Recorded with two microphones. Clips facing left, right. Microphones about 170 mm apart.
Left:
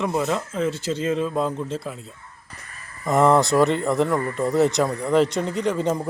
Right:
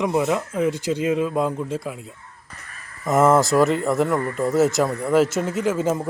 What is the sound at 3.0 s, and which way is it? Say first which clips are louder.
Speech: right 1 dB; centre (ahead or behind).